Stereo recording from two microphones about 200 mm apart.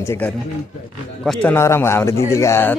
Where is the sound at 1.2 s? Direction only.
5° left (ahead or behind).